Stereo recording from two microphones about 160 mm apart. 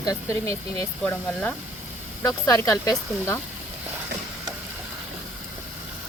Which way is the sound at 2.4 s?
20° left (ahead or behind).